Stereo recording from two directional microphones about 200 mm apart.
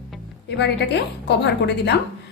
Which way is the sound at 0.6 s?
60° left (ahead or behind).